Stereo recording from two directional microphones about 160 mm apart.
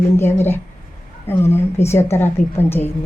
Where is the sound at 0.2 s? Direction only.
15° left (ahead or behind).